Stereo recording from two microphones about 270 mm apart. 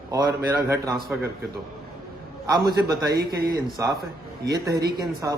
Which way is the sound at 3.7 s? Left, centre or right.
Centre.